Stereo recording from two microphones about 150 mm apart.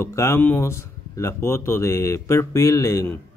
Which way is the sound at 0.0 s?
20° left (ahead or behind).